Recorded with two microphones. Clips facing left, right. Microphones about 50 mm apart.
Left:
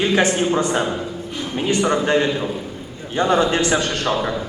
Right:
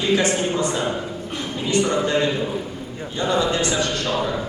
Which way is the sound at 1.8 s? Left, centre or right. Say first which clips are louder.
Left 4 dB; left.